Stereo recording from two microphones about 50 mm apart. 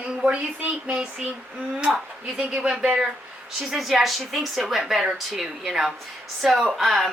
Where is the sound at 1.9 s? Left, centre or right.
Centre.